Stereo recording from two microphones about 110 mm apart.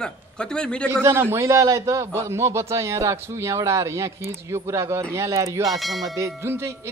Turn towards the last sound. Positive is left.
turn(degrees=-20)  # may be behind; listen again after turning